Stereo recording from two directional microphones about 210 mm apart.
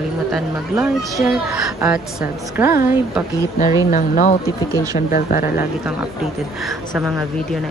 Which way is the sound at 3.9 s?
40° left (ahead or behind).